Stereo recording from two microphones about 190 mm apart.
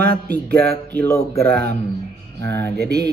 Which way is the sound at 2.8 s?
55° right (ahead or behind).